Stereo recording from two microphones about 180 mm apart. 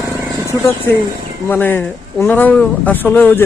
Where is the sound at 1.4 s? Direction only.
10° left (ahead or behind).